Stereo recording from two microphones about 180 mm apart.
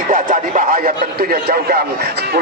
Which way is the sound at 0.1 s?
50° right (ahead or behind).